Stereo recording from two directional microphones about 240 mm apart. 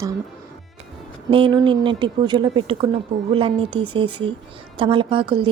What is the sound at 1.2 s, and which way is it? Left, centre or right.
Speech, right.